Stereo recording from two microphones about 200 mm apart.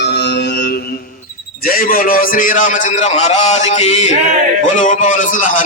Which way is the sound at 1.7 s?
45° left (ahead or behind).